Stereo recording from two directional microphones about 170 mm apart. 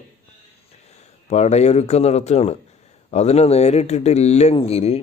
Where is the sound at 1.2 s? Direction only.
40° left (ahead or behind).